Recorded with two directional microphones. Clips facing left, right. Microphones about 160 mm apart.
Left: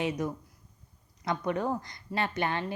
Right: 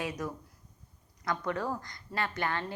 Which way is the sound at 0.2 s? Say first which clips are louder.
Left 4 dB; 20° left (ahead or behind).